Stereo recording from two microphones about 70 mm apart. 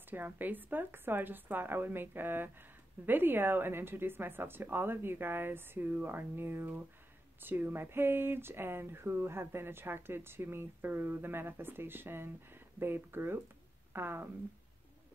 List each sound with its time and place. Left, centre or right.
0.1 s a woman's voice: right